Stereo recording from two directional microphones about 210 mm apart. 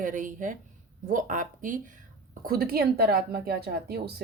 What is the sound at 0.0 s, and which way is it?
A woman's voice, 40° right (ahead or behind).